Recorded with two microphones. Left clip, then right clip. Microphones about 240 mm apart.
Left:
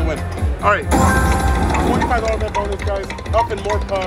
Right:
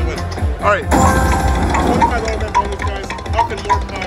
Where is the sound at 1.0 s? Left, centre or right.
Centre.